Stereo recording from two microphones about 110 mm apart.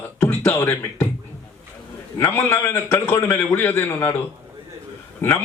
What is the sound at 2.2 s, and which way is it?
A man's voice, 20° left (ahead or behind).